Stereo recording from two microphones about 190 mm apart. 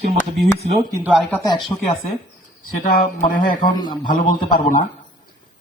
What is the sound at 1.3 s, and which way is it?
Speech, 20° left (ahead or behind).